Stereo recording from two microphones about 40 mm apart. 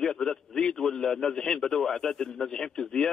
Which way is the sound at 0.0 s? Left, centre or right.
Centre.